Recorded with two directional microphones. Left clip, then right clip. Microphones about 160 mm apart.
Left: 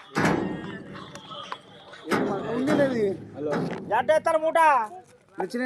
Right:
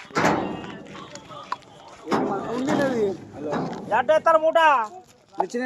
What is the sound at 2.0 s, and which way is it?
Speech, 15° left (ahead or behind).